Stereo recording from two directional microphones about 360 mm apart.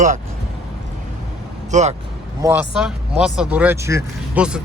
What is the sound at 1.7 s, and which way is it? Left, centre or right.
Speech, centre.